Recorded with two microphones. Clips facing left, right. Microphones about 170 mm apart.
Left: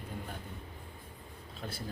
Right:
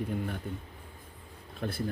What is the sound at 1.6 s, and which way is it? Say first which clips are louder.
Speech: right 8 dB; 55° right (ahead or behind).